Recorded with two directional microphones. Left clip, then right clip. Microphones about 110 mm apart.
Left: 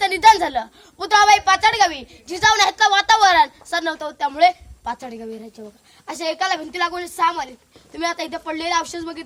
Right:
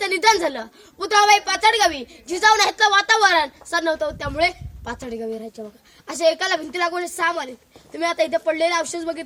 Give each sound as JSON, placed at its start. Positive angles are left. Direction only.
{"t": 0.0, "sound": "a woman's voice", "side_deg": 25}